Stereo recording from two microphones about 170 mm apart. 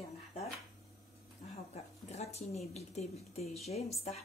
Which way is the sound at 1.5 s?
40° left (ahead or behind).